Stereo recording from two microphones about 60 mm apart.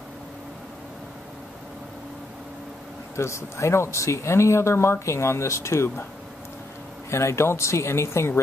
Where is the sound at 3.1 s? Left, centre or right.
Left.